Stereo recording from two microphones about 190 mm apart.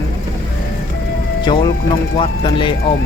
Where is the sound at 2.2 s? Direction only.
25° left (ahead or behind).